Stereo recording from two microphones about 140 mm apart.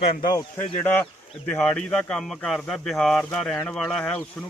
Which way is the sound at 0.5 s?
15° left (ahead or behind).